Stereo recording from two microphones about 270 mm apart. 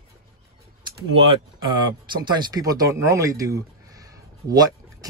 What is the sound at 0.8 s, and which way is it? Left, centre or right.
Speech, centre.